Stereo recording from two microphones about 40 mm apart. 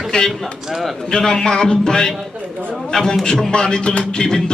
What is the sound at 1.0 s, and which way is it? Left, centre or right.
A man's voice, centre.